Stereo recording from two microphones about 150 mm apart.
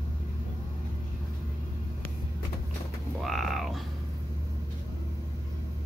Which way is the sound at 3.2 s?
Centre (ahead or behind).